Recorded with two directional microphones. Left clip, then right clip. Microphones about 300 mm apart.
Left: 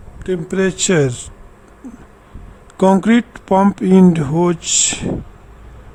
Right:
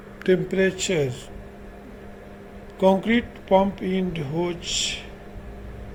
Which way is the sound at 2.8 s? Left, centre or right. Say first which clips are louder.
Left 6 dB; left.